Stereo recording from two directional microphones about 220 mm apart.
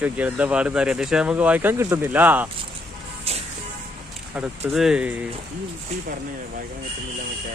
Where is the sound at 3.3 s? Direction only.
25° right (ahead or behind).